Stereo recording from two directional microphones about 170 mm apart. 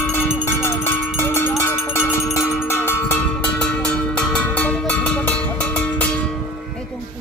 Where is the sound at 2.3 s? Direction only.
15° left (ahead or behind).